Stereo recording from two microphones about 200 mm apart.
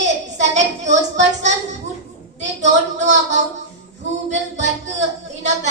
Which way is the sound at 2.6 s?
35° right (ahead or behind).